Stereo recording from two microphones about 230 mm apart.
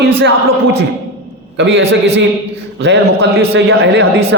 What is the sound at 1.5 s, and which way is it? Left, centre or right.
A woman's voice, right.